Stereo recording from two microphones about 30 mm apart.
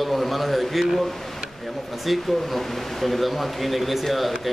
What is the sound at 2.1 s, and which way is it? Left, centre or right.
A man's voice, centre.